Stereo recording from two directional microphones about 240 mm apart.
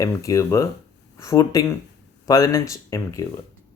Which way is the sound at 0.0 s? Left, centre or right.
Centre.